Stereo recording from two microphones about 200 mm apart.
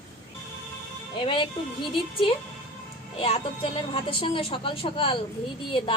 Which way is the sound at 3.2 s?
30° left (ahead or behind).